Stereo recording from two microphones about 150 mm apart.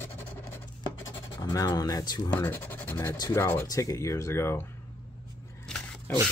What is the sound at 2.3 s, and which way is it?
Speech, 15° left (ahead or behind).